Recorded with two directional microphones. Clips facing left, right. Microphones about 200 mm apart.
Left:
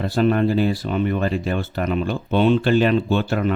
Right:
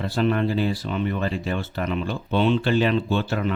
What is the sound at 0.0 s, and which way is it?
Speech, 45° left (ahead or behind).